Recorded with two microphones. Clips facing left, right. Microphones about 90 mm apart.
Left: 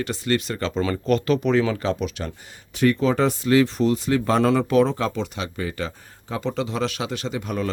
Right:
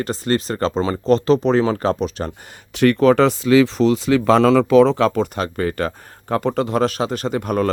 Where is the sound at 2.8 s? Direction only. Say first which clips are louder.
Right 6 dB; 70° right (ahead or behind); by 5.1 s 90° right.